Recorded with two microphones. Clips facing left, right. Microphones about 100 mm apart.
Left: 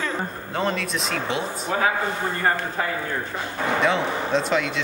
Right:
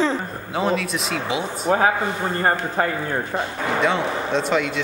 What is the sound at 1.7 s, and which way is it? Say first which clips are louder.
Speech: right 6 dB; 40° right (ahead or behind).